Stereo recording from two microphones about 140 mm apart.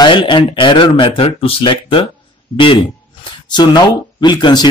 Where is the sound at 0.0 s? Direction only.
35° left (ahead or behind).